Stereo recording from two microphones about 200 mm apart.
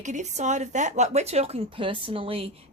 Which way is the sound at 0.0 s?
35° right (ahead or behind).